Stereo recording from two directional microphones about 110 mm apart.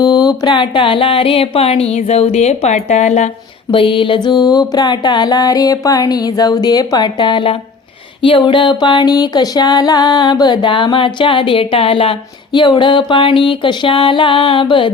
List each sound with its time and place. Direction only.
0.0 s speech: 40° left (ahead or behind); by 3.2 s 90° left
3.7 s music: 50° left (ahead or behind)